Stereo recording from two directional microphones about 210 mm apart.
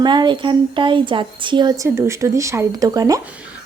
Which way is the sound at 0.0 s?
20° right (ahead or behind).